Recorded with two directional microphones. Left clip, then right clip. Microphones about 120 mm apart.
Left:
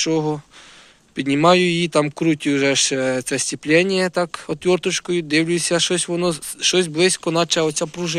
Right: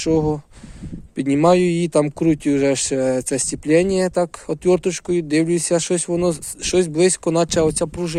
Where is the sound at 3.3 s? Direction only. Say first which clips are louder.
Left 2 dB; 55° right (ahead or behind).